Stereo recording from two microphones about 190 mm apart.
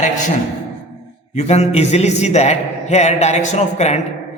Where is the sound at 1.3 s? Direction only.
35° left (ahead or behind).